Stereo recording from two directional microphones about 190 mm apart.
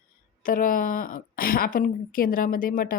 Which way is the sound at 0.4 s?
45° left (ahead or behind).